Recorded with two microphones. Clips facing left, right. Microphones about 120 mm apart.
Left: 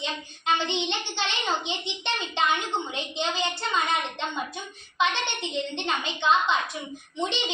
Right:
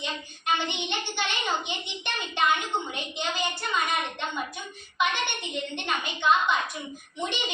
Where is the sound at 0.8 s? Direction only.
20° left (ahead or behind).